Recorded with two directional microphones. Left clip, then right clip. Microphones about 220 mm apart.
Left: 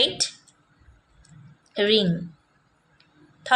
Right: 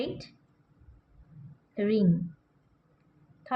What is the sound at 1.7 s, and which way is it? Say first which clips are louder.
Speech: left 8 dB; 50° left (ahead or behind).